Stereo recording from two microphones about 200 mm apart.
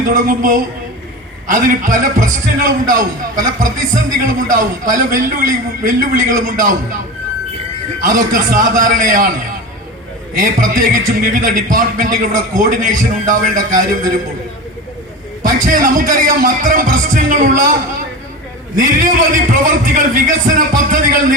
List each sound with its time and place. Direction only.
0.1 s a man's voice: 45° right (ahead or behind)
8.0 s a man's voice: 40° right (ahead or behind)
10.3 s a man's voice: 40° right (ahead or behind)
15.4 s a man's voice: 40° right (ahead or behind)
18.8 s a man's voice: 40° right (ahead or behind)